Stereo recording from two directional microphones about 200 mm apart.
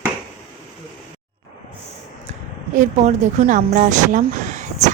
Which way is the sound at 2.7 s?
40° right (ahead or behind).